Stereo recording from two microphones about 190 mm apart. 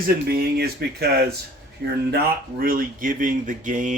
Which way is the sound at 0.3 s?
55° right (ahead or behind).